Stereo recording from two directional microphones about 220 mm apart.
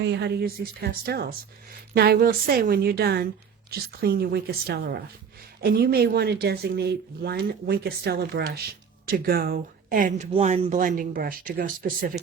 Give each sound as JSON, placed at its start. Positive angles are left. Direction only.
{"t": 0.0, "sound": "speech", "side_deg": -50}